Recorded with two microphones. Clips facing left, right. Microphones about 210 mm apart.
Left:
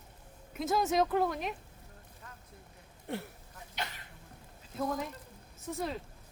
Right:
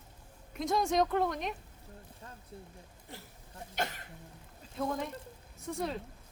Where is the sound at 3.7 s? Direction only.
50° right (ahead or behind).